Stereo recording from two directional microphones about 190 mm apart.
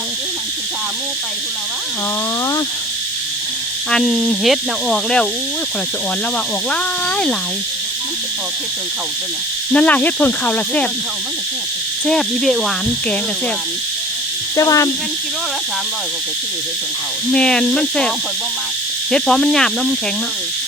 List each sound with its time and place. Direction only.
3.9 s speech: 5° left (ahead or behind)
9.7 s speech: 5° left (ahead or behind)
12.0 s speech: centre (ahead or behind)
14.5 s speech: 15° left (ahead or behind)
17.3 s speech: 5° left (ahead or behind)
19.1 s speech: 5° left (ahead or behind)